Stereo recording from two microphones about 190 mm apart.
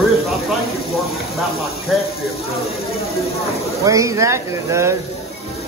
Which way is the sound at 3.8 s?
15° right (ahead or behind).